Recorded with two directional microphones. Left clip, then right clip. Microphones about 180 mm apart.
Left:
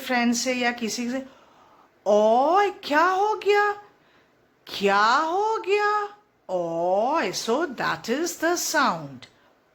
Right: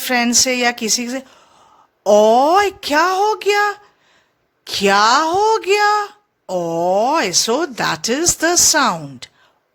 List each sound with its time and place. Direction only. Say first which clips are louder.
0.0 s a woman's voice: right 8 dB; 55° right (ahead or behind)